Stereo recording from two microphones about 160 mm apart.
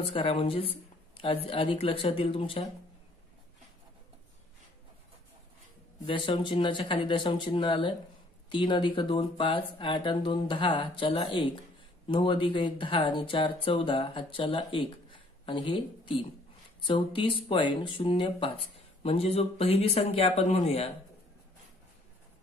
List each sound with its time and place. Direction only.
0.1 s speech: 35° left (ahead or behind)
6.0 s speech: 30° left (ahead or behind)